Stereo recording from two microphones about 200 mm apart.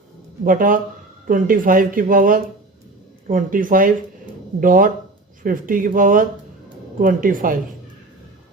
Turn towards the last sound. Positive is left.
turn(degrees=-45)  # may be behind; listen again after turning